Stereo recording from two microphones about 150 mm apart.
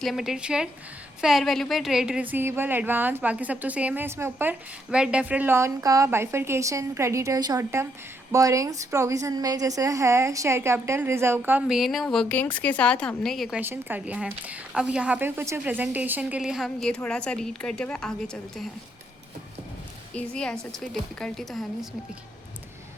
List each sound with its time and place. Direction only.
0.0 s a woman's voice: centre (ahead or behind)
11.8 s a woman's voice: centre (ahead or behind)
13.6 s a woman's voice: 10° right (ahead or behind); by 18.1 s 5° left (ahead or behind)
20.1 s speech: 5° left (ahead or behind)